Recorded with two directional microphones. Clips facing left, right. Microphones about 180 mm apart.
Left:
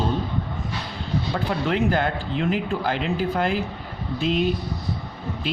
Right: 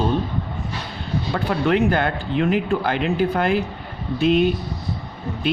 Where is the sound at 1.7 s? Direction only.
60° right (ahead or behind).